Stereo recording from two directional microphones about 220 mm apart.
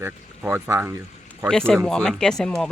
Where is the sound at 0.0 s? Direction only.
10° right (ahead or behind).